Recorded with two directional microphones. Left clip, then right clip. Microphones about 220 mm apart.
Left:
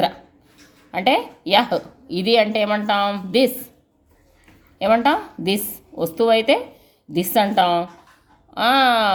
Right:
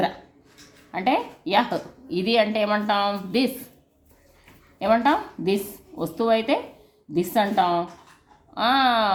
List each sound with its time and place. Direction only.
0.9 s a woman's voice: 25° left (ahead or behind)
4.8 s a woman's voice: 25° left (ahead or behind)